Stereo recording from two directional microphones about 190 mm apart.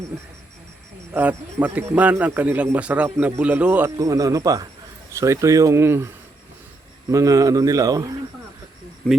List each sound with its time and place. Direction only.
1.1 s a man's voice: 10° right (ahead or behind)
7.1 s a man's voice: 15° right (ahead or behind)
9.0 s speech: 10° left (ahead or behind)